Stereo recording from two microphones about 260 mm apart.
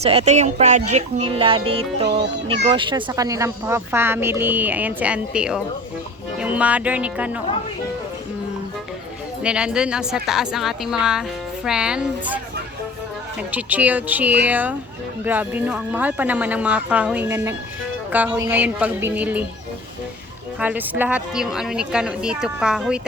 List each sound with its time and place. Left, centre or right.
0.0 s a woman's voice: right; by 7.4 s centre
9.4 s a woman's voice: centre
13.5 s a woman's voice: centre
20.6 s a woman's voice: centre